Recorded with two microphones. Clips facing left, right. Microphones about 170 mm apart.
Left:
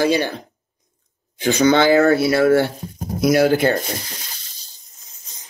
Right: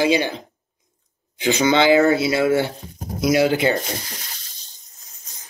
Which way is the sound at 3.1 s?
55° left (ahead or behind).